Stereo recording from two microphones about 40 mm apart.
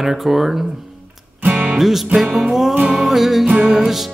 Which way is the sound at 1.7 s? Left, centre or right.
Centre.